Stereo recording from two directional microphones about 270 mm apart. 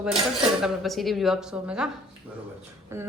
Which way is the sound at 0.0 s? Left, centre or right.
Centre.